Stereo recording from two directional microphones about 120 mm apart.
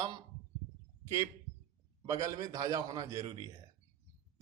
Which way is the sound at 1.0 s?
25° right (ahead or behind).